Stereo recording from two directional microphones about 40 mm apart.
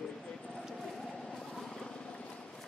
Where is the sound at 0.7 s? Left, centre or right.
Centre.